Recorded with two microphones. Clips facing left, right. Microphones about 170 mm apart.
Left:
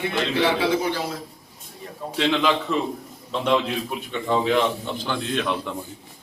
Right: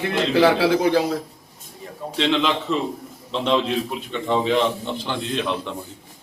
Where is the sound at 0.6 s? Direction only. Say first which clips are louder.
Right 5 dB; 85° right.